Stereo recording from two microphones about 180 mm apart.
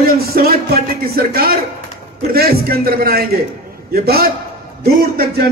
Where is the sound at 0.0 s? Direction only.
55° right (ahead or behind).